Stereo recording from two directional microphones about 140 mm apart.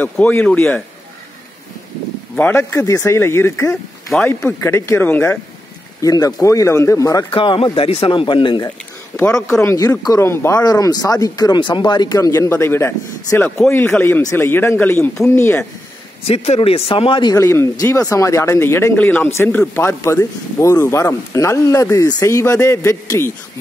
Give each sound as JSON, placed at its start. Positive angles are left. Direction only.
{"t": 0.0, "sound": "speech", "side_deg": 10}
{"t": 2.3, "sound": "speech", "side_deg": 15}
{"t": 5.9, "sound": "speech", "side_deg": 25}
{"t": 7.2, "sound": "speech", "side_deg": 40}
{"t": 9.6, "sound": "speech", "side_deg": 20}
{"t": 16.3, "sound": "speech", "side_deg": 45}
{"t": 17.4, "sound": "speech", "side_deg": 20}